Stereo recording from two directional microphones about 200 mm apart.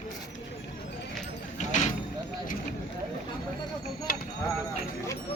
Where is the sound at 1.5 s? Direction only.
35° left (ahead or behind).